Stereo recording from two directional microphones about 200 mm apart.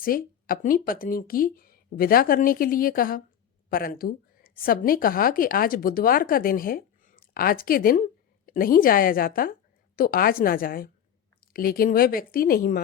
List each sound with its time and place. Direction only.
0.0 s a woman's voice: 45° left (ahead or behind)